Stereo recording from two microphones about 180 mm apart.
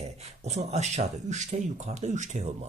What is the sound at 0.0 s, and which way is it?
Speech, 35° right (ahead or behind).